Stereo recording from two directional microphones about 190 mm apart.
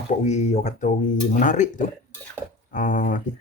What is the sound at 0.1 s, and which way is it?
Speech, 35° left (ahead or behind).